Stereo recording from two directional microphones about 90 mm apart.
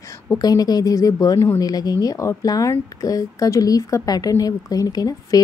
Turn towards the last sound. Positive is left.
turn(degrees=45)  # may be behind; listen again after turning